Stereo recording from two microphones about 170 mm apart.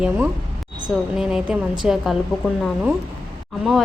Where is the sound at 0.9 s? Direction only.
5° right (ahead or behind).